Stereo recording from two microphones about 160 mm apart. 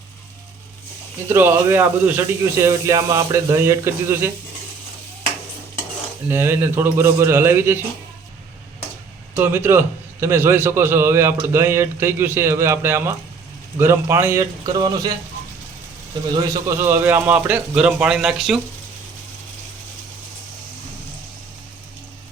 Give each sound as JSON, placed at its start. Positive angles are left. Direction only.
{"t": 1.3, "sound": "a man's voice", "side_deg": -15}
{"t": 6.2, "sound": "a man's voice", "side_deg": -15}
{"t": 9.3, "sound": "a man's voice", "side_deg": -15}
{"t": 16.3, "sound": "a man's voice", "side_deg": -15}